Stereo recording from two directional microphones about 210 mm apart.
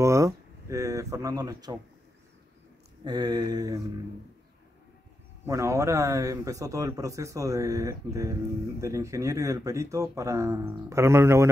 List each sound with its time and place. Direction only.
0.0 s speech: 15° right (ahead or behind)
3.0 s a sound: 20° right (ahead or behind)
5.4 s speech: 15° right (ahead or behind)